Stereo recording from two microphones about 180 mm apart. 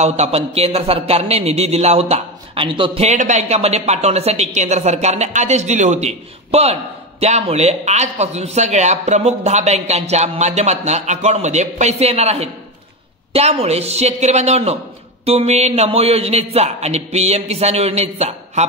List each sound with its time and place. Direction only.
0.0 s a man's voice: 35° right (ahead or behind)